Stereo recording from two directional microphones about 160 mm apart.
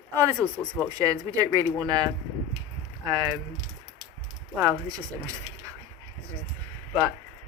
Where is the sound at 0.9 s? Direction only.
20° right (ahead or behind).